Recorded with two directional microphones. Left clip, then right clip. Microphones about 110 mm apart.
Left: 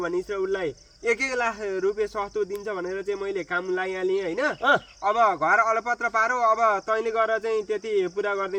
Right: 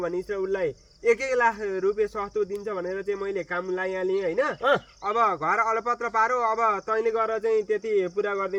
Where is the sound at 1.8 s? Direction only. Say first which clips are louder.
Even; 25° left (ahead or behind).